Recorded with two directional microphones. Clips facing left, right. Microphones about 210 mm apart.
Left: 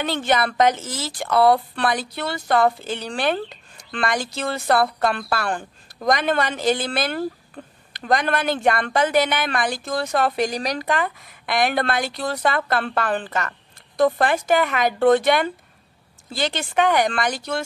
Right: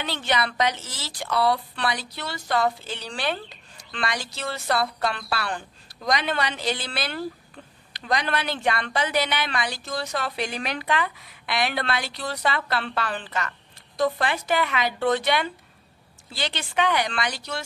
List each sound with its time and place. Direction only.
0.0 s a woman's voice: 50° left (ahead or behind)